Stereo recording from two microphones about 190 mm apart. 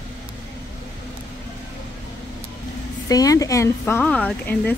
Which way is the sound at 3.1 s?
20° left (ahead or behind).